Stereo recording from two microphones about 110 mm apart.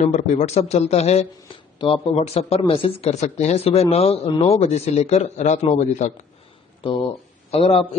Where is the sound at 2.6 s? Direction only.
55° left (ahead or behind); by 6.1 s 90° left.